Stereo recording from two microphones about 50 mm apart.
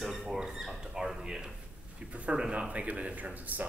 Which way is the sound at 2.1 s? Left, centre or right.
Right.